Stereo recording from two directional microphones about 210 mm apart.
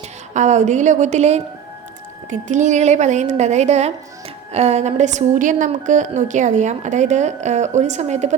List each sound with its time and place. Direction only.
0.3 s a woman's voice: 35° right (ahead or behind)
2.5 s a woman's voice: 35° right (ahead or behind)